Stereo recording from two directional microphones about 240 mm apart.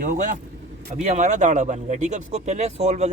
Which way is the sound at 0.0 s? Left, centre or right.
Right.